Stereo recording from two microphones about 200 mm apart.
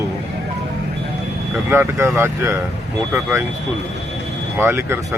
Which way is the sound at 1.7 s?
10° right (ahead or behind).